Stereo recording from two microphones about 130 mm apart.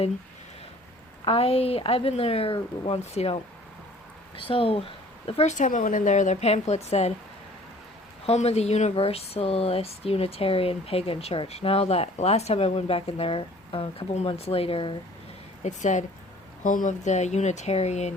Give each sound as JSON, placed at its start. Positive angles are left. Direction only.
{"t": 1.2, "sound": "speech", "side_deg": 45}
{"t": 8.3, "sound": "speech", "side_deg": 55}
{"t": 14.1, "sound": "speech", "side_deg": 55}
{"t": 15.6, "sound": "a woman's voice", "side_deg": 70}
{"t": 16.6, "sound": "speech", "side_deg": 80}